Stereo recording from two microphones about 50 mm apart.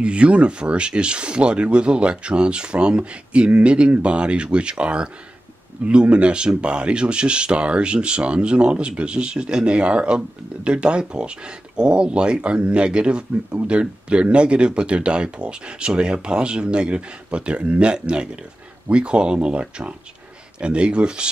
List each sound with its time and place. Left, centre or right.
0.0 s speech: right